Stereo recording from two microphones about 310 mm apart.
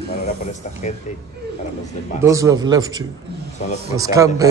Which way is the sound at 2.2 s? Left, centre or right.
Centre.